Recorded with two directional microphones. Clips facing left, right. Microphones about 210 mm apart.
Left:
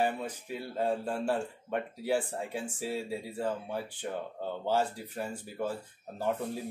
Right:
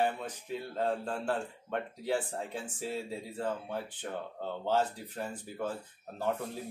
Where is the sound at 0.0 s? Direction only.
10° left (ahead or behind).